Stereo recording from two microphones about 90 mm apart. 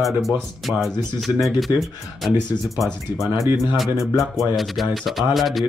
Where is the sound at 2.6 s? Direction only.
Centre (ahead or behind).